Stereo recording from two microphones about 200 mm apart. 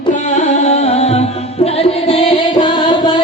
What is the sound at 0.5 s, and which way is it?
Music, 35° left (ahead or behind).